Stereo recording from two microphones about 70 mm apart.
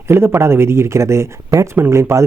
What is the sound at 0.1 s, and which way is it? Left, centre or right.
Speech, right.